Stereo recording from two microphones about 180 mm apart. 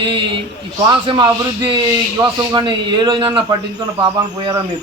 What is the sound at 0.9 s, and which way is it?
A man's voice, 25° right (ahead or behind).